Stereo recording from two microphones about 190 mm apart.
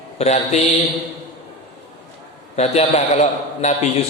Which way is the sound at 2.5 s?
35° left (ahead or behind).